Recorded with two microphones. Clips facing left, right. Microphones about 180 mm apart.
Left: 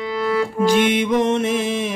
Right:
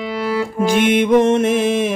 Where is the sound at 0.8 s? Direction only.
50° right (ahead or behind).